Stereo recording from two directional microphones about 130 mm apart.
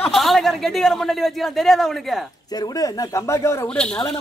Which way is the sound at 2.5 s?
30° left (ahead or behind).